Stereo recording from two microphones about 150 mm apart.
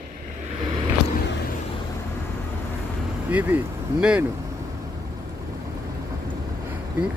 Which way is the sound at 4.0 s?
10° right (ahead or behind).